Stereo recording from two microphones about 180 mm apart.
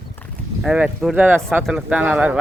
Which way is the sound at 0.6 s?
5° right (ahead or behind).